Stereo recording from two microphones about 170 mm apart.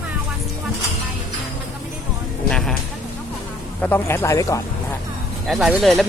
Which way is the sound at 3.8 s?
10° left (ahead or behind).